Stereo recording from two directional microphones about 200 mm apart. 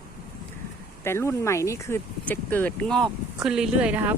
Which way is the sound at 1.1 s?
15° left (ahead or behind).